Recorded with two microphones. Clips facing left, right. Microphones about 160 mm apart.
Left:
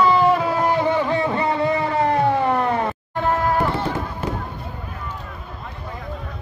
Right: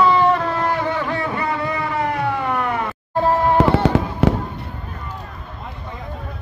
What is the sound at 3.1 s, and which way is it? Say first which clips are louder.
Music: right 5 dB; 30° right (ahead or behind).